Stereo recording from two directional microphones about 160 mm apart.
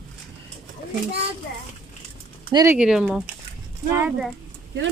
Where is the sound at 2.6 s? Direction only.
5° right (ahead or behind).